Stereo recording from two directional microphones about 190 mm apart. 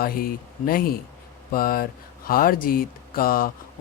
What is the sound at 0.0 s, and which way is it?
Speech, 50° left (ahead or behind).